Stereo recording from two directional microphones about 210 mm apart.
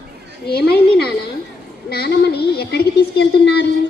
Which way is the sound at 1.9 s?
50° left (ahead or behind).